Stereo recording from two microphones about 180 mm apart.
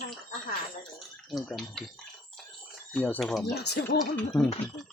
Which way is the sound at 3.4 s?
65° left (ahead or behind).